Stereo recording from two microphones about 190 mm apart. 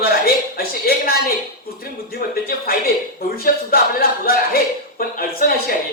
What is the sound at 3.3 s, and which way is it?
A woman's voice, 50° left (ahead or behind).